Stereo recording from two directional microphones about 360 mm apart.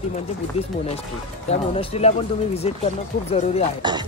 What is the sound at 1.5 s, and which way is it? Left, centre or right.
Speech, centre.